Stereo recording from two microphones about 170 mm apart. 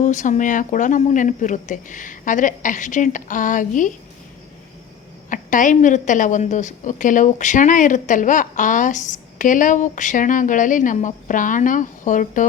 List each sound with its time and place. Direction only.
0.0 s a woman's voice: 45° left (ahead or behind)
5.3 s a woman's voice: 50° left (ahead or behind)